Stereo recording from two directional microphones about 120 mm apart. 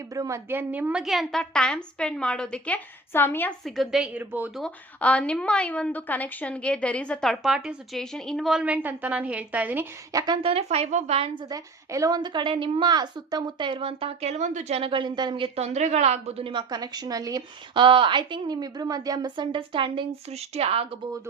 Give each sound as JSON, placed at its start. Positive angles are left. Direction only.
{"t": 0.1, "sound": "a woman's voice", "side_deg": -25}
{"t": 1.0, "sound": "a woman's voice", "side_deg": 0}
{"t": 3.6, "sound": "a woman's voice", "side_deg": 0}
{"t": 4.1, "sound": "a woman's voice", "side_deg": -15}
{"t": 4.5, "sound": "a woman's voice", "side_deg": 10}
{"t": 10.1, "sound": "a woman's voice", "side_deg": -30}
{"t": 10.4, "sound": "a woman's voice", "side_deg": -55}
{"t": 11.4, "sound": "a woman's voice", "side_deg": -30}
{"t": 15.5, "sound": "a woman's voice", "side_deg": -65}
{"t": 16.5, "sound": "a woman's voice", "side_deg": -40}
{"t": 17.7, "sound": "a woman's voice", "side_deg": -45}
{"t": 20.3, "sound": "a woman's voice", "side_deg": -60}